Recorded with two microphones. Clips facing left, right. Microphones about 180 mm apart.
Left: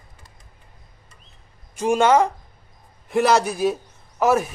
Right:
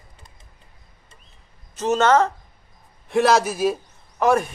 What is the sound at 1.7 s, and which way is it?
Speech, 10° left (ahead or behind).